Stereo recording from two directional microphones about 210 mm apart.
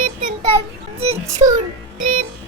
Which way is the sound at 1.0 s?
30° right (ahead or behind).